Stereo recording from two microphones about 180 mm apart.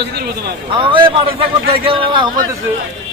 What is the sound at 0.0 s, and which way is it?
Speech, 60° right (ahead or behind).